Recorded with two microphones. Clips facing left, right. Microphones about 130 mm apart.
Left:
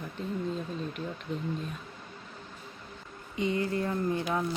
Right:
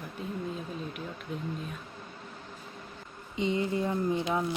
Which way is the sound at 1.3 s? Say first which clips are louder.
Left 2 dB; 5° right (ahead or behind).